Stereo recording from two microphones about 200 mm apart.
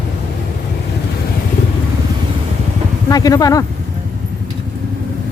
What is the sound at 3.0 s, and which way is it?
Speech, 20° left (ahead or behind).